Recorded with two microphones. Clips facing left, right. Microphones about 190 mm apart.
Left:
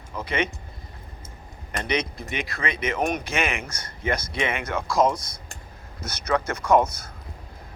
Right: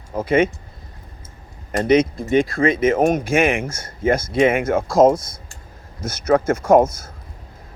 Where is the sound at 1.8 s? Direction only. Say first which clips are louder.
Right 12 dB; 50° right (ahead or behind).